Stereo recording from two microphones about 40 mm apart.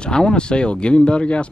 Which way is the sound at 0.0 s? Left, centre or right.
Left.